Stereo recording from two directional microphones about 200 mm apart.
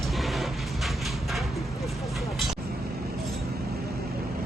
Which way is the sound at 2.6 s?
50° right (ahead or behind).